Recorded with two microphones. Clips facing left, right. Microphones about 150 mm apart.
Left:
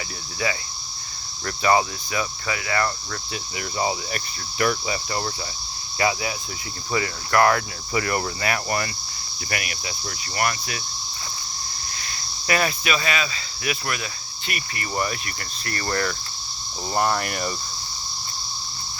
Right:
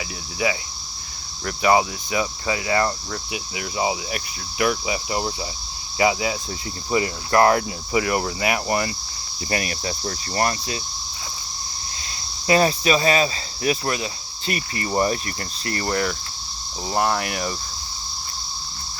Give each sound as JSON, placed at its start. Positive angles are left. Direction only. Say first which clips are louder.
{"t": 0.4, "sound": "cricket", "louder": "right 3 dB", "side_deg": -15}
{"t": 2.5, "sound": "speech", "louder": "right 4 dB", "side_deg": -20}
{"t": 3.3, "sound": "cricket", "louder": "right 1 dB", "side_deg": -5}
{"t": 6.0, "sound": "speech", "louder": "right 4 dB", "side_deg": -20}
{"t": 7.9, "sound": "cricket", "louder": "right 3 dB", "side_deg": -10}
{"t": 9.5, "sound": "speech", "louder": "right 5 dB", "side_deg": -30}
{"t": 12.5, "sound": "speech", "louder": "right 5 dB", "side_deg": -30}
{"t": 15.6, "sound": "speech", "louder": "right 4 dB", "side_deg": -20}
{"t": 15.9, "sound": "cricket", "louder": "right 1 dB", "side_deg": -10}
{"t": 16.9, "sound": "speech", "louder": "right 1 dB", "side_deg": -5}